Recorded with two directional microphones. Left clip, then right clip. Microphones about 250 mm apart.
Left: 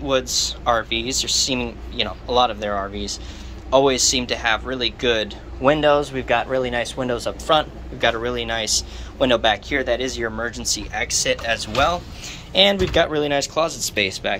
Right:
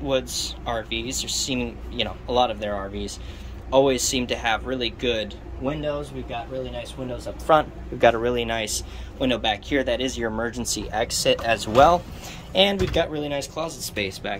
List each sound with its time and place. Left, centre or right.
0.0 s speech: centre
7.4 s speech: centre
12.5 s speech: centre